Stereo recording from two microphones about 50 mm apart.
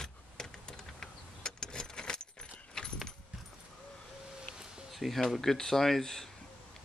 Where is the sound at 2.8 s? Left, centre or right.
Centre.